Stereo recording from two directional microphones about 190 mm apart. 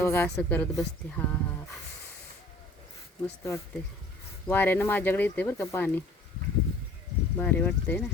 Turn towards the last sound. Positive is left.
turn(degrees=5)  # may be behind; listen again after turning